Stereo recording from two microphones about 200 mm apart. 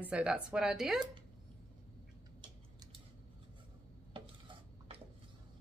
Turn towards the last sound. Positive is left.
turn(degrees=-25)  # may be behind; listen again after turning